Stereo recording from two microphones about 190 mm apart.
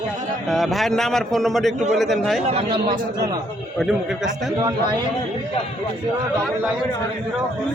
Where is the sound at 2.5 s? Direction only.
25° right (ahead or behind).